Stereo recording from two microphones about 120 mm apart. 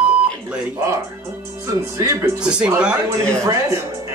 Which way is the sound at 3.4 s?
25° right (ahead or behind).